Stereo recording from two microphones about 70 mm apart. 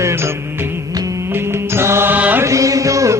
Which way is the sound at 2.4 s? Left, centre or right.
Right.